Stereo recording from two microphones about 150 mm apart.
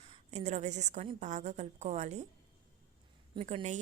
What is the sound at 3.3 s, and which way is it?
Speech, 45° right (ahead or behind).